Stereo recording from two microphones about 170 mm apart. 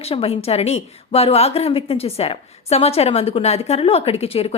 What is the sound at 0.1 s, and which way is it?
A woman's voice, 35° left (ahead or behind).